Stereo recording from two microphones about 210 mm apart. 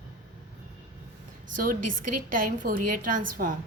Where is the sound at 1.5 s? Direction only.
40° right (ahead or behind).